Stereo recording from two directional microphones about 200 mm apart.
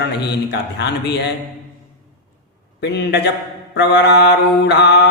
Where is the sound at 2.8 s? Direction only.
60° left (ahead or behind).